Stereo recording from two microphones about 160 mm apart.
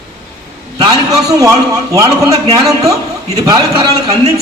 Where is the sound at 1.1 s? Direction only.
20° right (ahead or behind).